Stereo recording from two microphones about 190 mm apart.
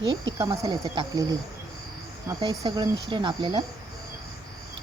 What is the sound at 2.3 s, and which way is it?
Speech, 25° right (ahead or behind).